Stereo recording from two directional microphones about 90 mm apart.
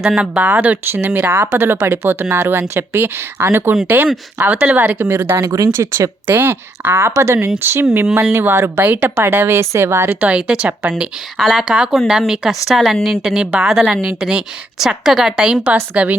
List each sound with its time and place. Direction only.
0.0 s speech: 10° right (ahead or behind); by 5.4 s 25° right (ahead or behind)
5.4 s speech: 40° right (ahead or behind)
10.2 s a woman's voice: 15° right (ahead or behind)